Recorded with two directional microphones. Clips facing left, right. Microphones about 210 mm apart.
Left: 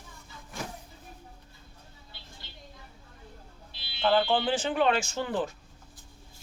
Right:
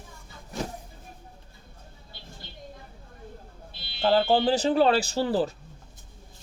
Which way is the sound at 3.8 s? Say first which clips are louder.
Right 2 dB; 40° right (ahead or behind).